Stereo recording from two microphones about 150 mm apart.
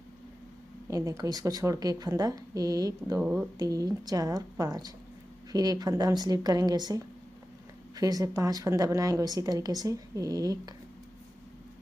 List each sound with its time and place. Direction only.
0.8 s speech: 25° right (ahead or behind)
3.2 s speech: 10° right (ahead or behind)
3.5 s speech: 25° right (ahead or behind)